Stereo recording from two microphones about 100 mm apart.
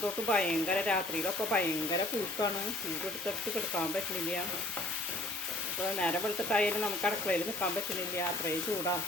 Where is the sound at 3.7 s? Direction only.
10° left (ahead or behind).